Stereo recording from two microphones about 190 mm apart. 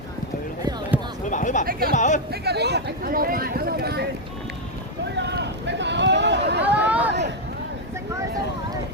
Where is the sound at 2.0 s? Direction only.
40° left (ahead or behind).